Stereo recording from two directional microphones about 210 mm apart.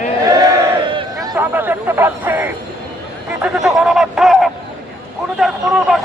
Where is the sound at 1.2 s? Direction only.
10° right (ahead or behind).